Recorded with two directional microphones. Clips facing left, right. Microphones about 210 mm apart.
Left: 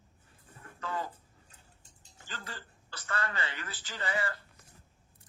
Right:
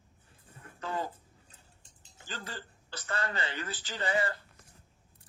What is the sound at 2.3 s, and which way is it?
A man's voice, 30° right (ahead or behind).